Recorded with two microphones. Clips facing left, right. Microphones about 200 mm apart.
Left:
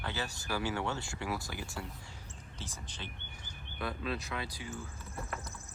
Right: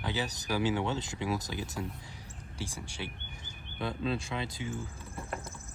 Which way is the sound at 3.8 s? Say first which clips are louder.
Right 4 dB; 25° right (ahead or behind).